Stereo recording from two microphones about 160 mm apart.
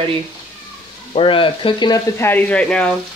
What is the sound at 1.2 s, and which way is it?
Frying, 35° left (ahead or behind).